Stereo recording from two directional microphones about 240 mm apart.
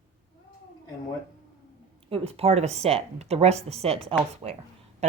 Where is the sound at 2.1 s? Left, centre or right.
Right.